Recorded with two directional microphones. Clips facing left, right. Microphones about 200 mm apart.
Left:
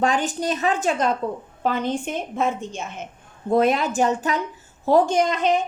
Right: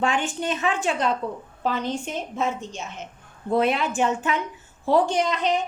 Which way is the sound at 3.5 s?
45° left (ahead or behind).